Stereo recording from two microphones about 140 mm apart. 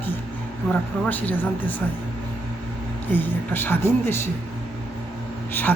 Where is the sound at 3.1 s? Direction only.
15° left (ahead or behind).